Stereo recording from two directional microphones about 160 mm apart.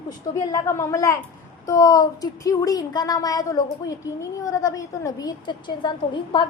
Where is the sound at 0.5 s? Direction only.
20° left (ahead or behind).